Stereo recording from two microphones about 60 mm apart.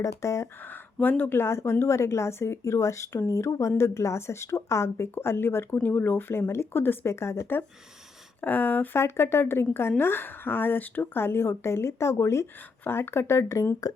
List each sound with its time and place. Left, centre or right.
0.0 s speech: left
1.0 s speech: left
5.1 s speech: left
8.4 s speech: left
9.0 s speech: left